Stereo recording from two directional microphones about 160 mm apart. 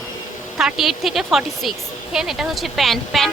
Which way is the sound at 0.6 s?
Centre (ahead or behind).